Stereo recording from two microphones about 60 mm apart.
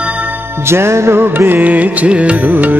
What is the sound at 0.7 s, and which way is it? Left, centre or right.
Music, right.